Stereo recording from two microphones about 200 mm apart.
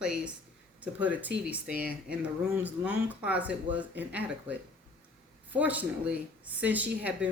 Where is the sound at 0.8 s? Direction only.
5° right (ahead or behind).